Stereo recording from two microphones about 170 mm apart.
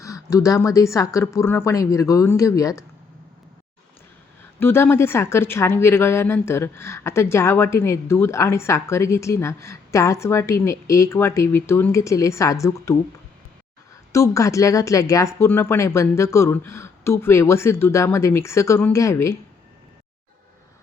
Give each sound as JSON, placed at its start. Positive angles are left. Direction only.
{"t": 0.0, "sound": "speech", "side_deg": 20}
{"t": 4.6, "sound": "a woman's voice", "side_deg": 15}
{"t": 14.1, "sound": "a woman's voice", "side_deg": 20}